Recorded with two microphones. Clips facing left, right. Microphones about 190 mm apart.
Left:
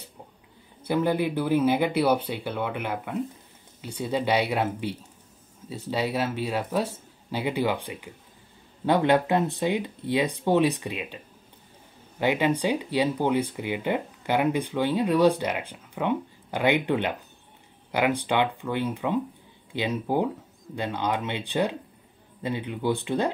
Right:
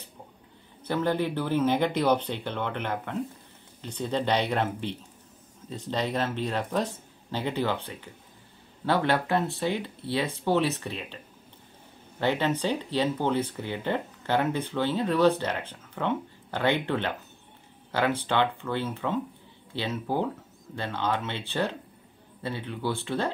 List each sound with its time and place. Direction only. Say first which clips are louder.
0.8 s speech: left 2 dB; 10° left (ahead or behind)
12.2 s speech: left 2 dB; 10° left (ahead or behind)